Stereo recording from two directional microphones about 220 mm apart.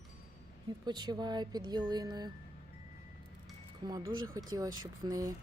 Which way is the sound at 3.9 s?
15° right (ahead or behind).